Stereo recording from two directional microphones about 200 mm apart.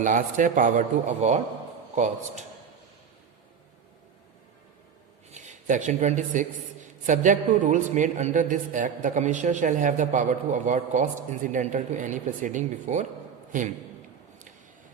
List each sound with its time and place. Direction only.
0.0 s a man's voice: 40° right (ahead or behind)
5.3 s a man's voice: 35° right (ahead or behind)